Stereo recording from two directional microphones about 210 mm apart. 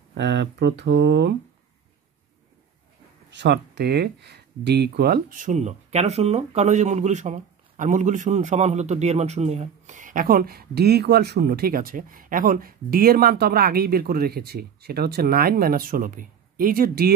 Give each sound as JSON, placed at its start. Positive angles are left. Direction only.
{"t": 0.1, "sound": "speech", "side_deg": -55}
{"t": 3.3, "sound": "speech", "side_deg": -55}